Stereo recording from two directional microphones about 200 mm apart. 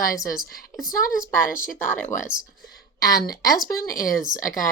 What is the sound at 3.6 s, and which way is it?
Speech, 45° left (ahead or behind).